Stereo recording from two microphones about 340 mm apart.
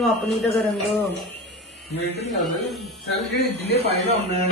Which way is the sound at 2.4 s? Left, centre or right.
Centre.